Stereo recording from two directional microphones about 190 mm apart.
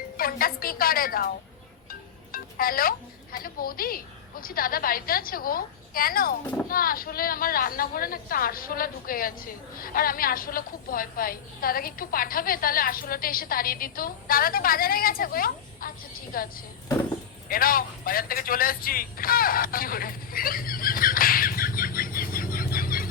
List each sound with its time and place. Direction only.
0.2 s a woman's voice: 50° left (ahead or behind)
2.3 s a woman's voice: 50° left (ahead or behind)
17.5 s speech: 50° left (ahead or behind)